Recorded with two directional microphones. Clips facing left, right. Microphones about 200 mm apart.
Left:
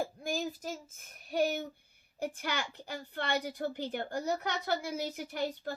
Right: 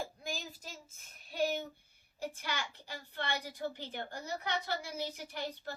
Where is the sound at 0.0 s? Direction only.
50° left (ahead or behind).